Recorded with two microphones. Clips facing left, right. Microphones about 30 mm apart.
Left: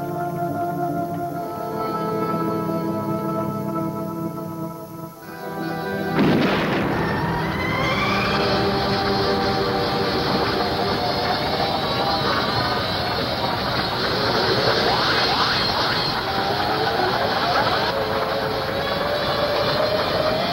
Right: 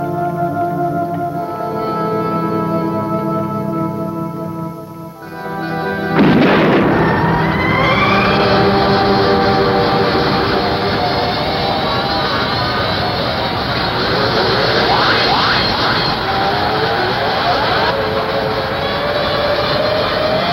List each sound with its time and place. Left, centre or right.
6.1 s a sound: right
14.1 s vehicle: right
19.4 s vehicle: right